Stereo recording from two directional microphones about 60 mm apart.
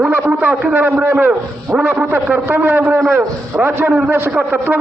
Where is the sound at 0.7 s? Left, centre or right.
Right.